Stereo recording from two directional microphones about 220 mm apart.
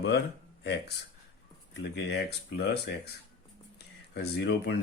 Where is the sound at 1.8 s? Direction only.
50° left (ahead or behind).